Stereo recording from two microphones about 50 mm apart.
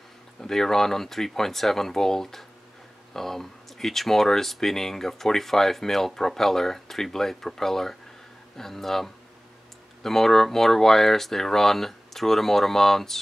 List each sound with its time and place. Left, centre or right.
0.4 s speech: centre